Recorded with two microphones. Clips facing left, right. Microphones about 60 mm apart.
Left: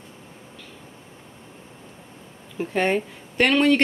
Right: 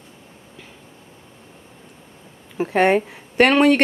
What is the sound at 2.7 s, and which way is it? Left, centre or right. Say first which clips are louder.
Speech: right 6 dB; right.